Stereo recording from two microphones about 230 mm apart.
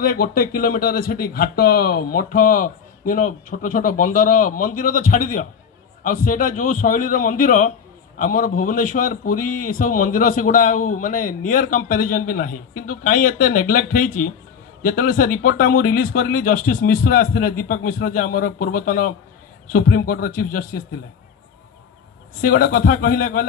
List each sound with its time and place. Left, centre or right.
0.0 s speech: left
22.4 s speech: left